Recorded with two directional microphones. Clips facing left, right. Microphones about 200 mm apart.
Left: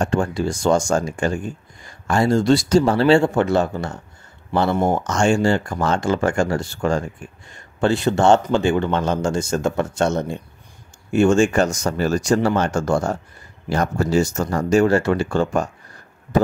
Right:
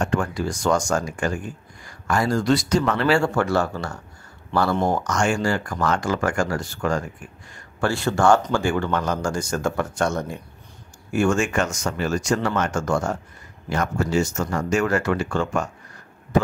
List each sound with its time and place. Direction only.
0.0 s speech: 30° left (ahead or behind)